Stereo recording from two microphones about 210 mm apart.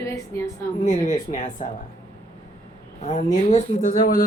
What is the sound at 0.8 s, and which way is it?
Speech, 35° left (ahead or behind).